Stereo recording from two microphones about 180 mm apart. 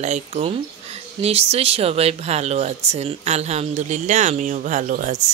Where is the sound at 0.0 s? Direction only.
35° right (ahead or behind).